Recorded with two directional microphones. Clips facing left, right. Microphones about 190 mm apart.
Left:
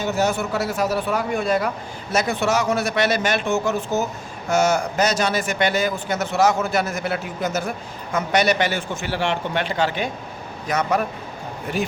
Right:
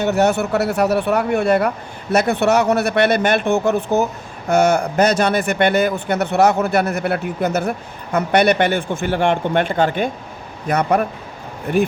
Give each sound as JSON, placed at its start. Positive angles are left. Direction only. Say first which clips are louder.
{"t": 0.0, "sound": "a man's voice", "louder": "right 5 dB", "side_deg": -65}